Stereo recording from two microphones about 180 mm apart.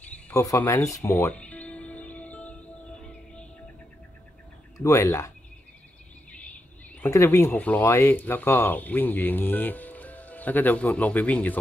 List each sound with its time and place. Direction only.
0.3 s music: 15° left (ahead or behind)
4.7 s speech: 15° left (ahead or behind)
7.0 s speech: 15° left (ahead or behind)